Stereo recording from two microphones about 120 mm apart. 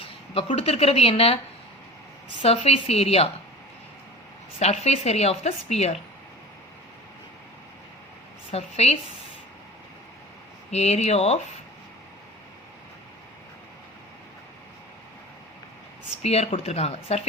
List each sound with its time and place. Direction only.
0.4 s a woman's voice: 60° left (ahead or behind)
2.4 s a woman's voice: 55° left (ahead or behind)
4.6 s a woman's voice: 65° left (ahead or behind)
8.4 s a woman's voice: 60° left (ahead or behind)
10.7 s a woman's voice: 65° left (ahead or behind)
16.2 s a woman's voice: 60° left (ahead or behind)